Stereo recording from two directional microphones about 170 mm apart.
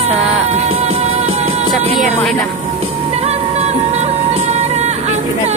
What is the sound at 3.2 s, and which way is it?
Music, 40° right (ahead or behind).